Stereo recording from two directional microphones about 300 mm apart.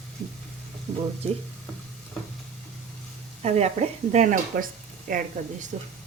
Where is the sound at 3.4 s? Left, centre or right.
Right.